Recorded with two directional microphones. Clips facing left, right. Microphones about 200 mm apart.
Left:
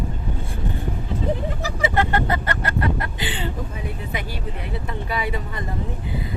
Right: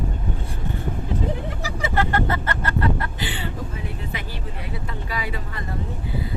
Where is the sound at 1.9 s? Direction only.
15° left (ahead or behind).